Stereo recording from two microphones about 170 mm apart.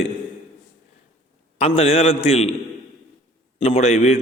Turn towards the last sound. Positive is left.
turn(degrees=40)  # may be behind; listen again after turning